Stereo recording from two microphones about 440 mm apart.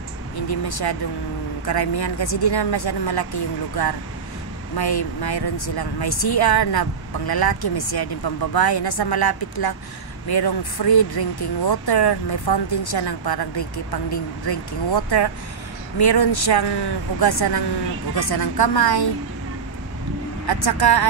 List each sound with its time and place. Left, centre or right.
0.5 s speech: left
20.4 s speech: left